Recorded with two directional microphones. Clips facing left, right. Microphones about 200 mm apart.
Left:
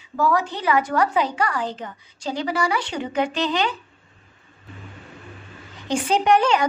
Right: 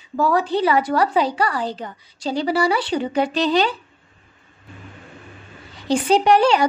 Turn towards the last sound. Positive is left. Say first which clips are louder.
# right 3 dB
turn(degrees=-35)  # may be behind; listen again after turning